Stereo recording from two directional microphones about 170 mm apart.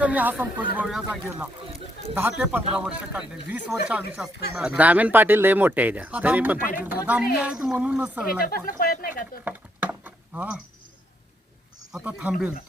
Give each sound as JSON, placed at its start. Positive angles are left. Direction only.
{"t": 0.0, "sound": "speech", "side_deg": -10}
{"t": 2.4, "sound": "a woman's voice", "side_deg": -10}
{"t": 8.4, "sound": "speech", "side_deg": 60}
{"t": 9.4, "sound": "typing", "side_deg": -10}
{"t": 11.9, "sound": "a woman's voice", "side_deg": -5}